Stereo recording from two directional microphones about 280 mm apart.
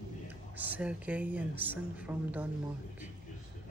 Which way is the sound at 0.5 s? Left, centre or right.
Centre.